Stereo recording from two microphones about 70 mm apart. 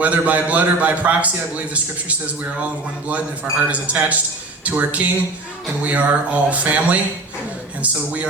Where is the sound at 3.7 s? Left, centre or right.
Right.